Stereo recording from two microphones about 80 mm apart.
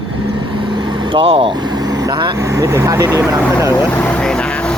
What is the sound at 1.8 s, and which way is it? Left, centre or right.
Vehicle, right.